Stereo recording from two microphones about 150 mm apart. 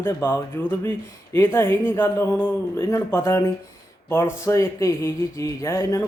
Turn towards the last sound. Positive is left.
turn(degrees=20)  # may be behind; listen again after turning